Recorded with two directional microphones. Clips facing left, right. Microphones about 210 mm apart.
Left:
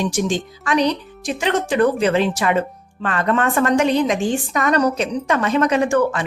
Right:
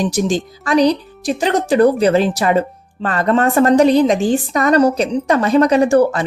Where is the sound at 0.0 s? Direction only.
35° right (ahead or behind).